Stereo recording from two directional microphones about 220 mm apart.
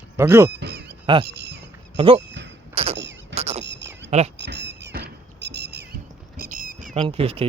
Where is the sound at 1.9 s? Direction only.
25° right (ahead or behind).